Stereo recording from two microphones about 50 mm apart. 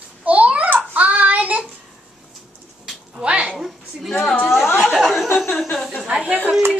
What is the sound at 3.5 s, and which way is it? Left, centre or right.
Speech, centre.